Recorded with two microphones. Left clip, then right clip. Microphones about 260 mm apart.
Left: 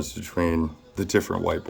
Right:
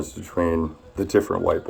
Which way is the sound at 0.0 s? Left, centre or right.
Left.